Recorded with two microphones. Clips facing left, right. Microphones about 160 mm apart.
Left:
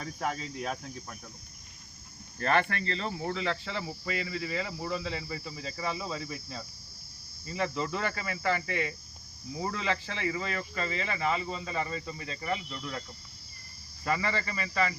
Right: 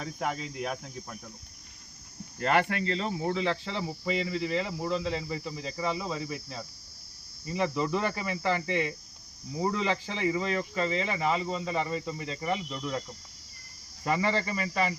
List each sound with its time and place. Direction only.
0.2 s speech: 15° right (ahead or behind)
2.4 s speech: 10° right (ahead or behind)
14.0 s speech: 20° right (ahead or behind)